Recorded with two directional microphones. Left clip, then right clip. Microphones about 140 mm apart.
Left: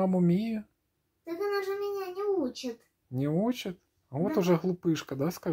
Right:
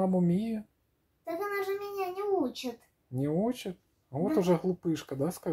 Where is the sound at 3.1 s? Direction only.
20° left (ahead or behind).